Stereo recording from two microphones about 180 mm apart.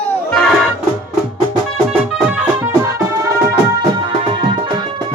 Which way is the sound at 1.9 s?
5° right (ahead or behind).